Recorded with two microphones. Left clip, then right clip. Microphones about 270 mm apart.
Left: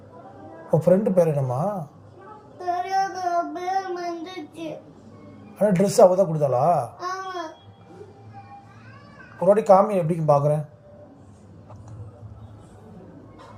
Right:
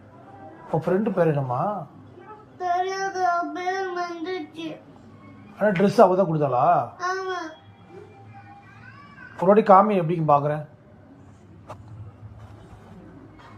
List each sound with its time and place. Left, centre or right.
0.9 s a man's voice: left
2.6 s child singing: centre
5.5 s a man's voice: left
6.9 s babbling: centre
9.4 s a man's voice: left